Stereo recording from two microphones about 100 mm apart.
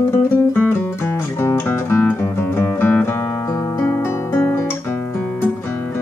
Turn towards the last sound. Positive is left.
turn(degrees=20)  # may be behind; listen again after turning